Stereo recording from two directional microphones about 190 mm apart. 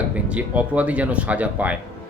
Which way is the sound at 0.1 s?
5° right (ahead or behind).